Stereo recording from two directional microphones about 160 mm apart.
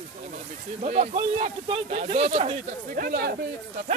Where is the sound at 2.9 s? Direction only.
65° right (ahead or behind).